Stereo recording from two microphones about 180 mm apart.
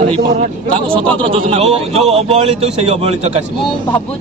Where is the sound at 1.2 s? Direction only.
30° right (ahead or behind).